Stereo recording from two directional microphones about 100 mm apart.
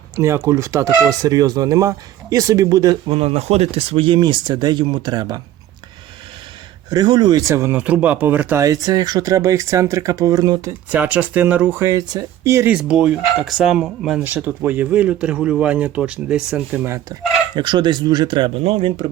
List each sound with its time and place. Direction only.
0.2 s speech: 30° right (ahead or behind)
3.1 s speech: 70° right (ahead or behind); by 5.4 s 45° right (ahead or behind)
6.9 s speech: 45° right (ahead or behind); by 7.8 s 30° right (ahead or behind)
7.8 s speech: 15° right (ahead or behind)
8.6 s speech: 35° right (ahead or behind)
10.8 s speech: 15° right (ahead or behind)
11.8 s speech: 35° right (ahead or behind)
12.6 s speech: 10° right (ahead or behind)
14.3 s speech: 20° right (ahead or behind)
17.5 s speech: 50° right (ahead or behind)
18.6 s speech: 65° right (ahead or behind)